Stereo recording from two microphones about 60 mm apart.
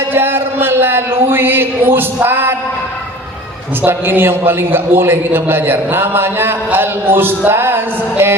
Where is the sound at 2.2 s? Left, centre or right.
Right.